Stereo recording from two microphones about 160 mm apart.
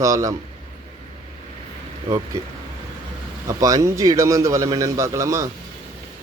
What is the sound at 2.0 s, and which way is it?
Speech, 25° right (ahead or behind).